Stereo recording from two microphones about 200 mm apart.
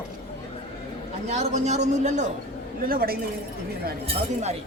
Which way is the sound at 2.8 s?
45° right (ahead or behind).